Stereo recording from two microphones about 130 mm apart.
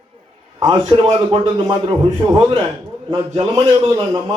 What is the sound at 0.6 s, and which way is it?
A man's voice, 35° right (ahead or behind).